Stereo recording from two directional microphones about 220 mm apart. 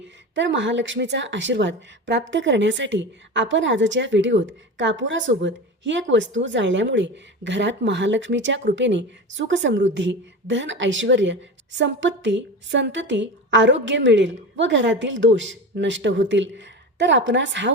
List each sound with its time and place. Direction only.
0.3 s a woman's voice: 55° right (ahead or behind)